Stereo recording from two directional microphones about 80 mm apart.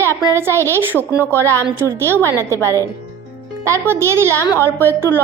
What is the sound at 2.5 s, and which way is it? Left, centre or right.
Speech, left.